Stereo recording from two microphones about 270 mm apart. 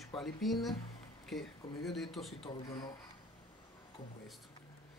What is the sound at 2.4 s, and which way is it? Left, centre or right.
Speech, centre.